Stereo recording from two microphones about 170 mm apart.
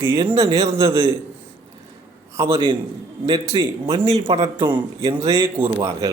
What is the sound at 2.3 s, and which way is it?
Speech, 15° right (ahead or behind).